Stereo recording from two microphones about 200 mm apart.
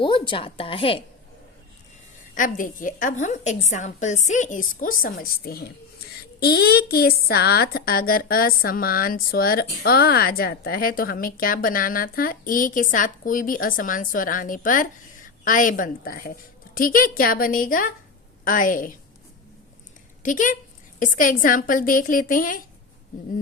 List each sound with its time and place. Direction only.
0.0 s a woman's voice: 25° left (ahead or behind)
2.3 s a woman's voice: 40° left (ahead or behind)
20.2 s a woman's voice: 40° left (ahead or behind)